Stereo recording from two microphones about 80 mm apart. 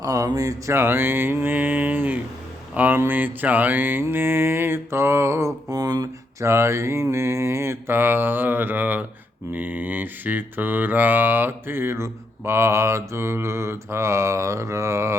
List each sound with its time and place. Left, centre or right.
0.0 s speech: right
0.7 s speech: right
4.0 s mantra: right
6.4 s mantra: right